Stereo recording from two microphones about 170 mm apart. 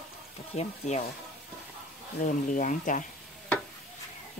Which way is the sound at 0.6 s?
45° left (ahead or behind).